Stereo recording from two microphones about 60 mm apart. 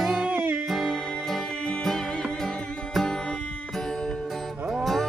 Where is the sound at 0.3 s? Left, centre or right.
Right.